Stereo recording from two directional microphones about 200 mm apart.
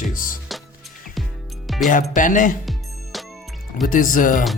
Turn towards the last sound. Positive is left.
turn(degrees=40)  # may be behind; listen again after turning